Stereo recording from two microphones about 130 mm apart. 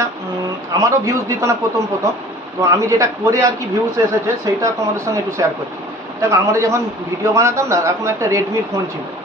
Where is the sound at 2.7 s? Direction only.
25° right (ahead or behind).